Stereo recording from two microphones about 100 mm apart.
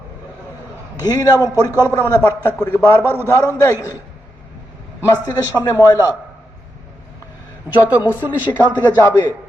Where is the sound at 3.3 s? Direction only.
25° left (ahead or behind).